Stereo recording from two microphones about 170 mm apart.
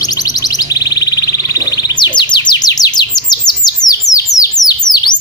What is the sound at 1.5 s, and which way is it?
Bird, 25° left (ahead or behind).